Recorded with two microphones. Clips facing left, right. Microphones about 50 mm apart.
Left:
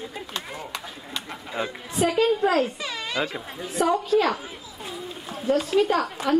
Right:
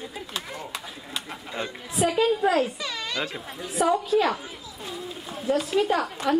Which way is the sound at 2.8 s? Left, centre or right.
Left.